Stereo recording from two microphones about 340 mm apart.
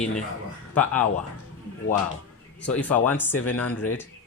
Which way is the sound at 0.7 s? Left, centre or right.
Centre.